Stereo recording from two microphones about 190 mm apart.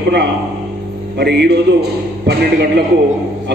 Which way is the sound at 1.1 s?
60° right (ahead or behind).